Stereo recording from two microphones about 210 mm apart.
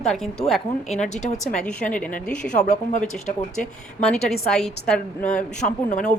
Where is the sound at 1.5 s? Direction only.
5° left (ahead or behind).